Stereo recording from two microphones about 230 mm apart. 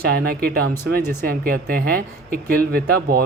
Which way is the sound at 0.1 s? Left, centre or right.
Right.